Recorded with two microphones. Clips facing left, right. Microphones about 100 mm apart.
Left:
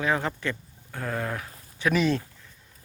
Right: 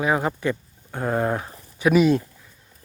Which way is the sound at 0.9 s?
25° right (ahead or behind).